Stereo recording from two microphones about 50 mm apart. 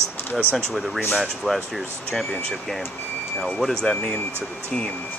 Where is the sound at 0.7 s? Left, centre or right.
Centre.